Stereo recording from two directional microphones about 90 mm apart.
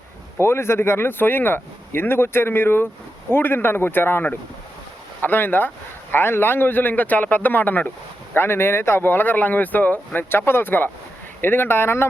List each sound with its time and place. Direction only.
0.3 s a man's voice: 30° left (ahead or behind)